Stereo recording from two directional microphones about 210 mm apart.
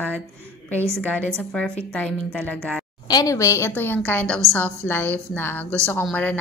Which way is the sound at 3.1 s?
15° left (ahead or behind).